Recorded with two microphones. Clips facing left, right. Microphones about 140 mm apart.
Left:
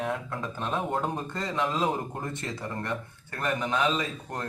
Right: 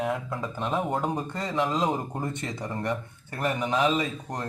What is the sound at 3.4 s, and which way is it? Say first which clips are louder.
Speech: right 2 dB; 15° right (ahead or behind).